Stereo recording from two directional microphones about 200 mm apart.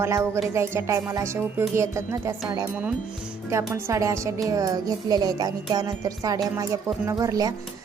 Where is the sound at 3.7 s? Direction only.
15° right (ahead or behind).